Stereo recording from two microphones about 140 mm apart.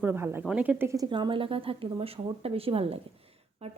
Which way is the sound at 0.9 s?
30° right (ahead or behind).